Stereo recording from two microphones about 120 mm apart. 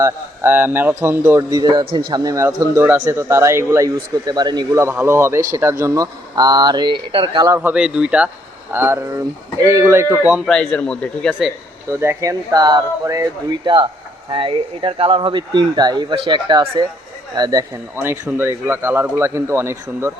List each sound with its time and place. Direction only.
0.0 s speech: 15° right (ahead or behind); by 1.8 s 35° right (ahead or behind)
1.8 s a man's voice: 45° right (ahead or behind)
2.2 s speech: 25° right (ahead or behind)
4.9 s speech: 20° right (ahead or behind); by 7.4 s 45° right (ahead or behind)
7.6 s speech: 10° right (ahead or behind)
8.7 s speech: 20° right (ahead or behind)
10.5 s speech: 5° left (ahead or behind)
11.3 s speech: 5° right (ahead or behind)
11.9 s speech: 20° right (ahead or behind)
17.9 s speech: 20° right (ahead or behind)